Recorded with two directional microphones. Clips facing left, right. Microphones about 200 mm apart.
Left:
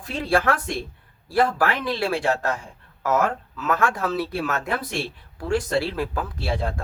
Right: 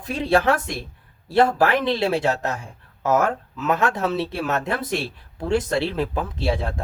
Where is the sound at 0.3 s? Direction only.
20° right (ahead or behind).